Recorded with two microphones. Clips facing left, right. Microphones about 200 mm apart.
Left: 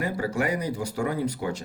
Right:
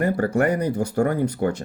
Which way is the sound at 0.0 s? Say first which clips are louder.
Right 7 dB; 55° right (ahead or behind).